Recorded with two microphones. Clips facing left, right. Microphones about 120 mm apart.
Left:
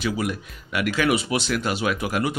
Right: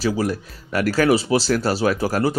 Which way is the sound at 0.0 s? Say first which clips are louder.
Right 4 dB; 35° right (ahead or behind).